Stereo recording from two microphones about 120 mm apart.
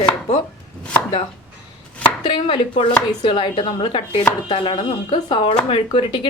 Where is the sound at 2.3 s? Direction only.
40° left (ahead or behind).